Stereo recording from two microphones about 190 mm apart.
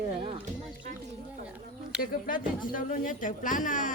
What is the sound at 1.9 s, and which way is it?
Speech, 5° right (ahead or behind).